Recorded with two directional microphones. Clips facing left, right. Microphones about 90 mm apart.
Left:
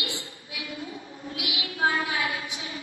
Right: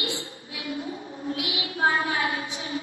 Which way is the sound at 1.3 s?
35° right (ahead or behind).